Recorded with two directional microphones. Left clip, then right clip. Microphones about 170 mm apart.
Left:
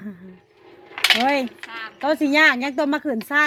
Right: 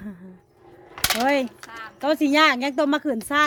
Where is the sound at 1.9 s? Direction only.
25° right (ahead or behind).